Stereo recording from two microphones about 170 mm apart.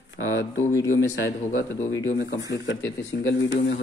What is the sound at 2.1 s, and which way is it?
Speech, 90° left.